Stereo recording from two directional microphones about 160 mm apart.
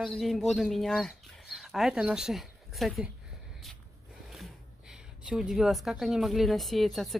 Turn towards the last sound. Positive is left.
turn(degrees=0)  # may be behind; listen again after turning